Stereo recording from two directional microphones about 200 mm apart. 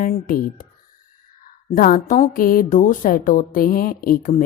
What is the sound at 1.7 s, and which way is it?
A woman's voice, 45° left (ahead or behind).